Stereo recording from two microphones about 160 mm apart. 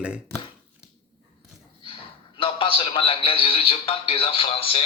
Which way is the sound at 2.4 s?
35° left (ahead or behind).